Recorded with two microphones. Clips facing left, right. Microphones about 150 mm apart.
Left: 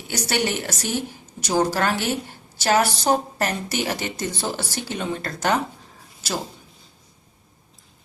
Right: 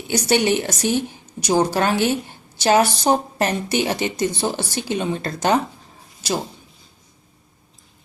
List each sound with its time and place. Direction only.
0.1 s a woman's voice: 20° right (ahead or behind)